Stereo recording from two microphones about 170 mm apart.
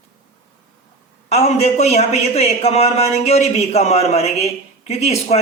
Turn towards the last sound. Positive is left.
turn(degrees=40)  # may be behind; listen again after turning